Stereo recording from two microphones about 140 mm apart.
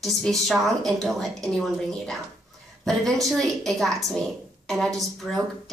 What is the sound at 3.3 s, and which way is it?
A woman's voice, centre (ahead or behind).